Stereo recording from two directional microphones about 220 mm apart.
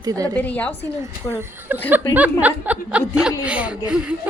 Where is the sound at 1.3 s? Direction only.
10° right (ahead or behind).